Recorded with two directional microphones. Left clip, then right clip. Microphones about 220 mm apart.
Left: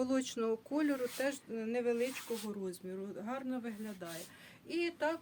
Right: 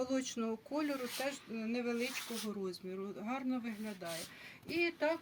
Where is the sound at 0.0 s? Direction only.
25° left (ahead or behind).